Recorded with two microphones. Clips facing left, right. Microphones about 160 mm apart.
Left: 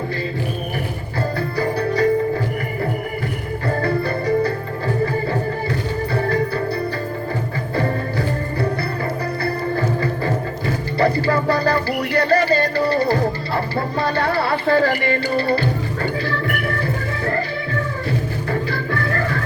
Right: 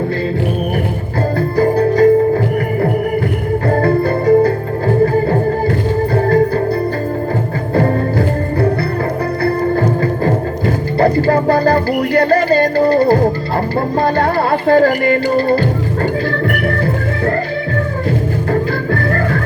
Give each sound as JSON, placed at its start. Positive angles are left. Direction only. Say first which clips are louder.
{"t": 1.4, "sound": "music", "louder": "right 10 dB", "side_deg": -45}
{"t": 3.7, "sound": "music", "louder": "right 6 dB", "side_deg": -50}
{"t": 9.4, "sound": "music", "louder": "right 8 dB", "side_deg": -50}
{"t": 18.5, "sound": "music", "louder": "right 6 dB", "side_deg": -50}